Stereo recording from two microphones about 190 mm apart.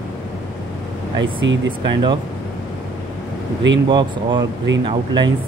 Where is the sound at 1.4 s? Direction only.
75° right (ahead or behind).